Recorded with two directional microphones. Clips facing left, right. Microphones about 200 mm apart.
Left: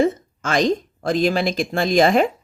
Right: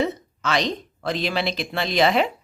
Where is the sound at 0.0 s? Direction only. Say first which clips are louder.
Left 5 dB; 50° left (ahead or behind).